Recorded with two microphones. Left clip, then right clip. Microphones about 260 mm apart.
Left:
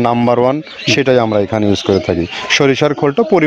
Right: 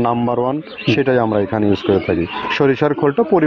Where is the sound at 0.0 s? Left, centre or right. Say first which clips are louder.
Left 5 dB; left.